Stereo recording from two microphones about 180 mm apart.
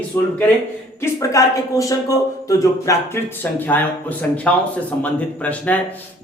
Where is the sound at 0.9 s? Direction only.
20° left (ahead or behind).